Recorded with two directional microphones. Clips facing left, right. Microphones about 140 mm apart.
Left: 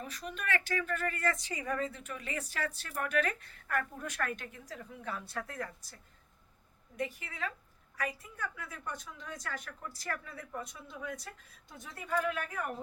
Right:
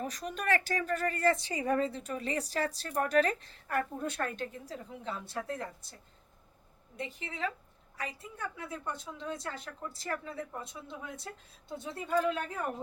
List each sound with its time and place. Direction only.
0.0 s speech: 40° right (ahead or behind)
6.9 s a woman's voice: 25° right (ahead or behind)